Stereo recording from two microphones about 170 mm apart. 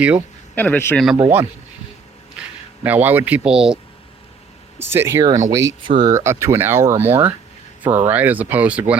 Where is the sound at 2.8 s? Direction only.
10° right (ahead or behind).